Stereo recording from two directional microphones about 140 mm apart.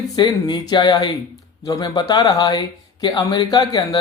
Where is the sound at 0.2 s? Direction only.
30° left (ahead or behind).